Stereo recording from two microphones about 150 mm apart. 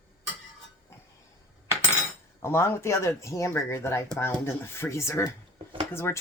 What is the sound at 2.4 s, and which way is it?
Speech, 15° left (ahead or behind).